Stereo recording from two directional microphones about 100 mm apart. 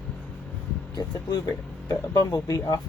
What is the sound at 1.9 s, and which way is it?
Speech, 40° left (ahead or behind).